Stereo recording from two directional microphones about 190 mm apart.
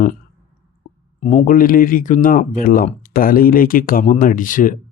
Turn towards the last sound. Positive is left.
turn(degrees=45)  # may be behind; listen again after turning